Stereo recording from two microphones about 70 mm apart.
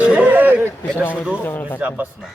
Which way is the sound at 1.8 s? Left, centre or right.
Right.